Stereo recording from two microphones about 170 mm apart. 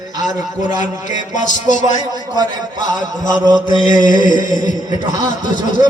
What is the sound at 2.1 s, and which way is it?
Speech, 25° right (ahead or behind).